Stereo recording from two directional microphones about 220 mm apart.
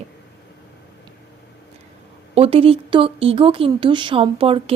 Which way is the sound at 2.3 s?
25° right (ahead or behind).